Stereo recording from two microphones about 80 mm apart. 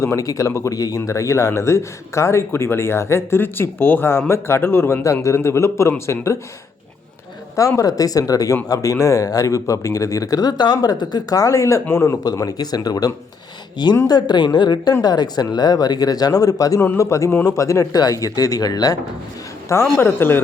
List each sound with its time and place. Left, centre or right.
0.0 s speech: left
7.8 s speech: left
12.2 s speech: left
14.1 s speech: left
19.6 s speech: left